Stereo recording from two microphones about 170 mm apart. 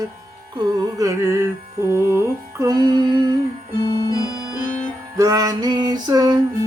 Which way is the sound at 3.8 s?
25° left (ahead or behind).